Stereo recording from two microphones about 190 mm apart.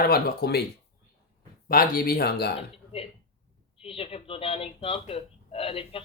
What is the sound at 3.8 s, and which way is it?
A woman's voice, 30° left (ahead or behind).